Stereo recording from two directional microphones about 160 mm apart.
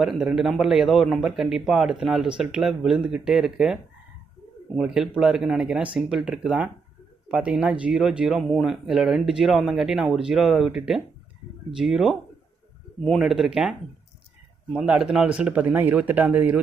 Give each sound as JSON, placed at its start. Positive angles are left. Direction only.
{"t": 0.0, "sound": "a man's voice", "side_deg": -5}
{"t": 4.8, "sound": "a man's voice", "side_deg": -5}